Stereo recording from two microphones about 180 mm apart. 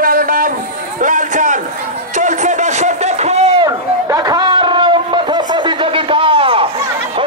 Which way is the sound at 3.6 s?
20° right (ahead or behind).